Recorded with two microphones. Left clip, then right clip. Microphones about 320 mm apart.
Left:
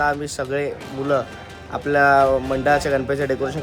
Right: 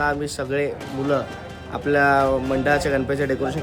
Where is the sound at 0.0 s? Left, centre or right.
Centre.